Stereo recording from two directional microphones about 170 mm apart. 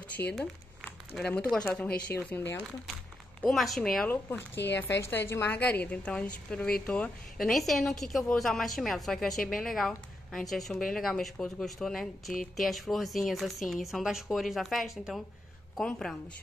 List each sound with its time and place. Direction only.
0.2 s a woman's voice: 15° left (ahead or behind)
3.4 s a woman's voice: centre (ahead or behind)
4.6 s a woman's voice: 90° left
5.0 s a woman's voice: 15° left (ahead or behind)